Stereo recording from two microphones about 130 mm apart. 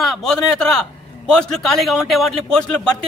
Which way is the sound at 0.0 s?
Centre (ahead or behind).